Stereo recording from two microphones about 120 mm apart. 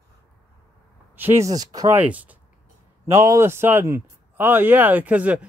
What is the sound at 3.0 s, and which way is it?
A man's voice, 25° right (ahead or behind).